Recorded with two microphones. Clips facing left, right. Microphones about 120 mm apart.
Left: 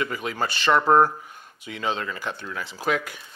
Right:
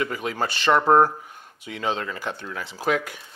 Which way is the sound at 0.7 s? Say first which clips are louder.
Right 1 dB; 35° right (ahead or behind).